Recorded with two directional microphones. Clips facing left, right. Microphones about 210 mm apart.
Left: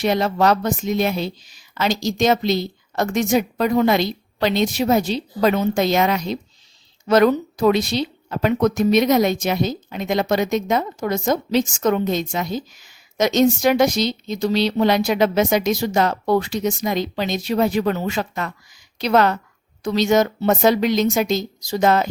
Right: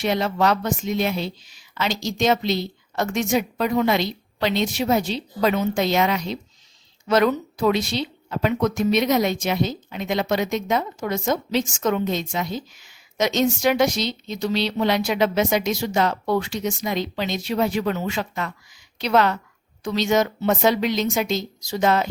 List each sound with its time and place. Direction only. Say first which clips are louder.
0.0 s speech: left 3 dB; 40° left (ahead or behind)